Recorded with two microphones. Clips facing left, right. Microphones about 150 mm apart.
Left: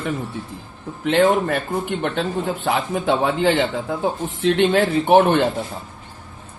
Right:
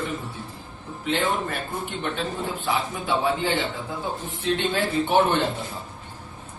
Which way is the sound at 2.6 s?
75° left (ahead or behind).